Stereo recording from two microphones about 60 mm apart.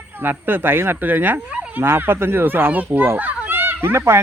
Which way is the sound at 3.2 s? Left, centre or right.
Right.